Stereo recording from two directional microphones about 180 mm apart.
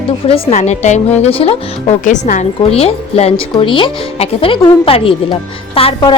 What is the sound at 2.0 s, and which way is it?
Speech, 45° left (ahead or behind).